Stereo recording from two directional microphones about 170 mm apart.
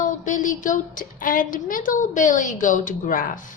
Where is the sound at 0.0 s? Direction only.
50° left (ahead or behind).